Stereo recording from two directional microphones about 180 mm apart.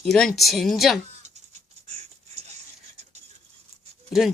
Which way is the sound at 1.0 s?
40° right (ahead or behind).